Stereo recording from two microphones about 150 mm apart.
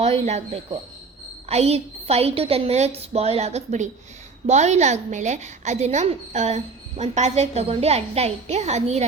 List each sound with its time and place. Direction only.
0.0 s a woman's voice: 45° right (ahead or behind)